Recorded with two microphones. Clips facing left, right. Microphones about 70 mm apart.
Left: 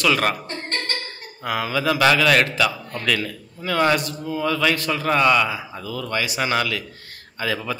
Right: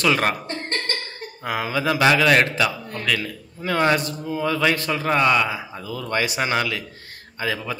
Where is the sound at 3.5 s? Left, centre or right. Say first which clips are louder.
Even; right.